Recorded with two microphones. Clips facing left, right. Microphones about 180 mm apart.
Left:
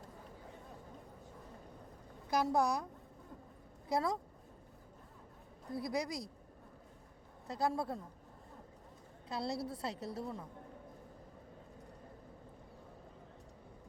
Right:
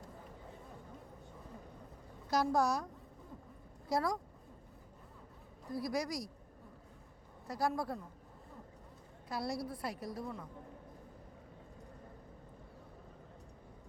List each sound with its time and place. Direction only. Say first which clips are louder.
2.3 s a woman's voice: right 1 dB; 20° left (ahead or behind)
3.8 s a woman's voice: even; 20° left (ahead or behind)
5.7 s a woman's voice: right 1 dB; 20° left (ahead or behind)
7.4 s a woman's voice: even; 20° left (ahead or behind)
9.3 s a woman's voice: even; 25° left (ahead or behind)